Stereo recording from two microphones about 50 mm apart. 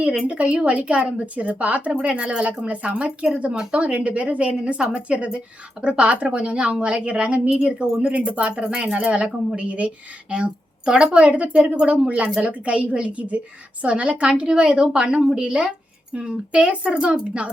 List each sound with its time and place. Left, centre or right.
0.3 s a woman's voice: right
7.5 s a woman's voice: centre